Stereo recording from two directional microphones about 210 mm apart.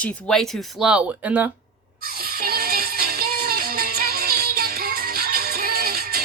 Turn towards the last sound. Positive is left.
turn(degrees=-45)  # may be behind; listen again after turning